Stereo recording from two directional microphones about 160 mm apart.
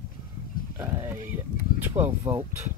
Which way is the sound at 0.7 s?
20° right (ahead or behind).